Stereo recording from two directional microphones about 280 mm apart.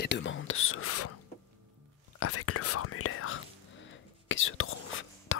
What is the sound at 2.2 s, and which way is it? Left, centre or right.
Whispering, left.